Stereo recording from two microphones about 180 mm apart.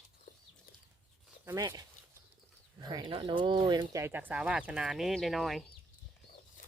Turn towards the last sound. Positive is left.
turn(degrees=0)  # may be behind; listen again after turning